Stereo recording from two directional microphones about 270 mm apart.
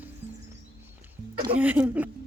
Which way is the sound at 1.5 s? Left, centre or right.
Centre.